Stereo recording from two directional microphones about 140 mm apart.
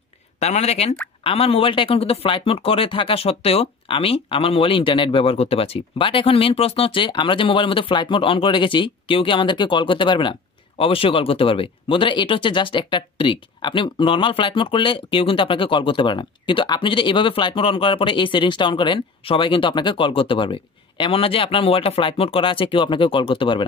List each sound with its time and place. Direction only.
0.4 s speech: 50° left (ahead or behind)